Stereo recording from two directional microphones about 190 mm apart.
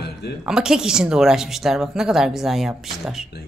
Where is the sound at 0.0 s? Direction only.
60° left (ahead or behind).